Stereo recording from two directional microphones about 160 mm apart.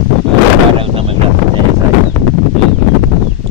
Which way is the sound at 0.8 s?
35° right (ahead or behind).